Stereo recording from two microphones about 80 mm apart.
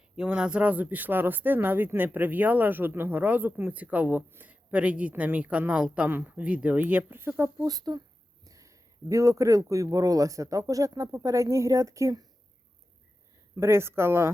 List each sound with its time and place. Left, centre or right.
0.2 s speech: centre; by 7.5 s right
7.6 s speech: right
8.4 s speech: right
13.6 s speech: right